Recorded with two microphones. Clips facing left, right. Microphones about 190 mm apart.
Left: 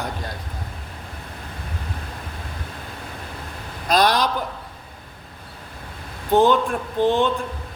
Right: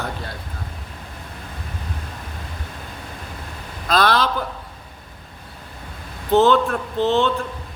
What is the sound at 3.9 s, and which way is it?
Speech, 15° left (ahead or behind).